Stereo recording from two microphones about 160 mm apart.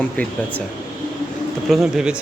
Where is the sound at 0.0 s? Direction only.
10° left (ahead or behind).